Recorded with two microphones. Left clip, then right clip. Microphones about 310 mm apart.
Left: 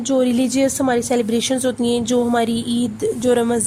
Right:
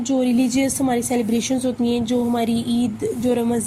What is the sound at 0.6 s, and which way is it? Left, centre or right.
Speech, left.